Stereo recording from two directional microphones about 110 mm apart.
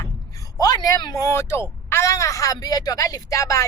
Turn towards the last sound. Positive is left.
turn(degrees=30)  # may be behind; listen again after turning